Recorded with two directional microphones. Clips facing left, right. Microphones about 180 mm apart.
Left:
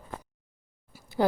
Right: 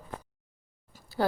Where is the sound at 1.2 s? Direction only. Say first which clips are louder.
Left 3 dB; 15° left (ahead or behind).